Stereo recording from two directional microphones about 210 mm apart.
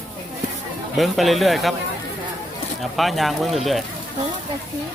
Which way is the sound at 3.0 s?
Centre (ahead or behind).